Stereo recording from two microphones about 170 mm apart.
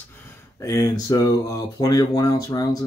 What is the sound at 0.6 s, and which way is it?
Speech, 20° left (ahead or behind).